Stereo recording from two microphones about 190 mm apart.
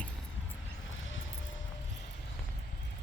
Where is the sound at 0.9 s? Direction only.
90° left.